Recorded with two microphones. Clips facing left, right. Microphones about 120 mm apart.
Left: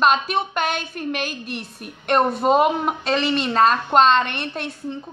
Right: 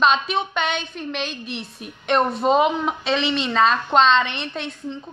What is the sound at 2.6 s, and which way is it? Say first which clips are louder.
A woman's voice: left 1 dB; 50° left (ahead or behind).